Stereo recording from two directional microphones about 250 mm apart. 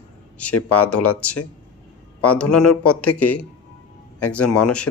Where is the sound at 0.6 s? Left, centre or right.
Left.